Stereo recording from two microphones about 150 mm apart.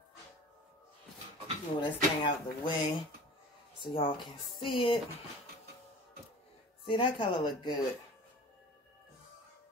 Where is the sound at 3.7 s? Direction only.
35° left (ahead or behind).